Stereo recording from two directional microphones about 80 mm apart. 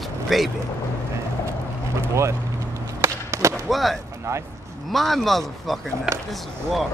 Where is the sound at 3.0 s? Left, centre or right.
Right.